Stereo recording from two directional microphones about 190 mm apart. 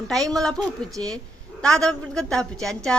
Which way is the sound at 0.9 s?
20° right (ahead or behind).